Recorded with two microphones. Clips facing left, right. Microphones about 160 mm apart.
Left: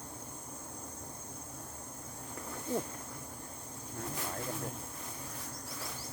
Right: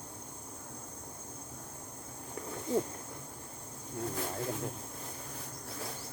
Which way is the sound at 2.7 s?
20° right (ahead or behind).